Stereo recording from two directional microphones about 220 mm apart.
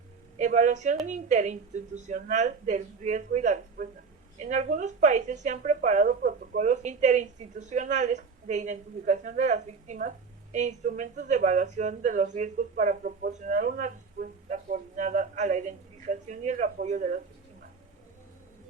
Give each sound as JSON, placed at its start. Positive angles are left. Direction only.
{"t": 0.3, "sound": "speech", "side_deg": -35}